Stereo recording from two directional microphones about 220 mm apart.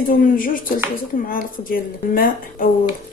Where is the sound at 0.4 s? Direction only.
40° left (ahead or behind).